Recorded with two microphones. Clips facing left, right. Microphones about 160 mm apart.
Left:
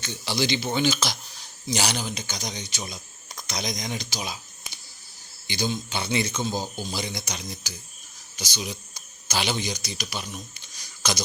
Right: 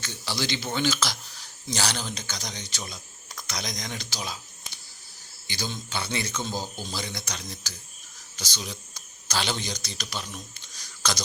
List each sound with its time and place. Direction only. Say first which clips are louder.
0.0 s speech: left 4 dB; 15° left (ahead or behind)